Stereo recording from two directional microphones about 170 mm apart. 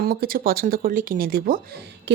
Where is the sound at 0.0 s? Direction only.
60° right (ahead or behind).